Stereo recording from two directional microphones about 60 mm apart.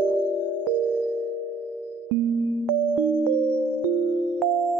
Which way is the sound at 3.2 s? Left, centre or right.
Right.